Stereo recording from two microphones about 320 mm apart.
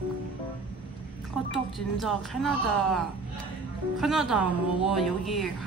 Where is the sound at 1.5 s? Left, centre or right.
Centre.